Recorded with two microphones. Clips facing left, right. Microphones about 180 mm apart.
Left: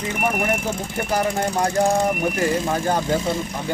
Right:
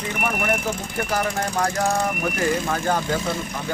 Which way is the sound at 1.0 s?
20° left (ahead or behind).